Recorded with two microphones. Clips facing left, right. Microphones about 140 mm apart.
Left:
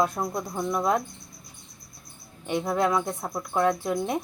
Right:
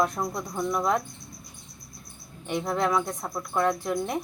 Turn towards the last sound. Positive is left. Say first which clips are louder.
# left 2 dB
turn(degrees=5)  # may be behind; listen again after turning